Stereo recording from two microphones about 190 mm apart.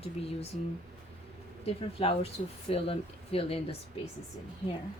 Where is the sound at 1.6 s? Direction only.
30° left (ahead or behind).